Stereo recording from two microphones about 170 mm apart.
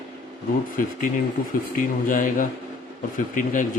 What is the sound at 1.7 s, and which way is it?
A man's voice, 50° left (ahead or behind).